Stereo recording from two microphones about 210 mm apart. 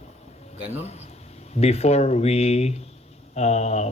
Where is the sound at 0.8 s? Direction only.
30° left (ahead or behind).